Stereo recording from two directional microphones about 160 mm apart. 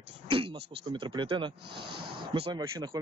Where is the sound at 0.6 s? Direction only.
90° right.